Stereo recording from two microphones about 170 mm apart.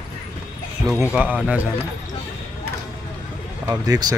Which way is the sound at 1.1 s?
10° right (ahead or behind).